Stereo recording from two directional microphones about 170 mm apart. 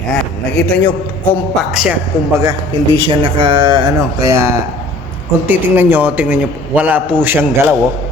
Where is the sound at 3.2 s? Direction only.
30° right (ahead or behind).